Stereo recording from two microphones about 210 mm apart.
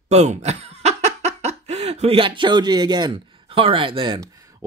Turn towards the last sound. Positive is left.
turn(degrees=-20)  # may be behind; listen again after turning